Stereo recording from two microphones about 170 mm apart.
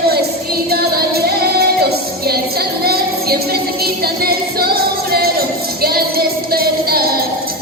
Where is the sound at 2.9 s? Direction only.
65° right (ahead or behind).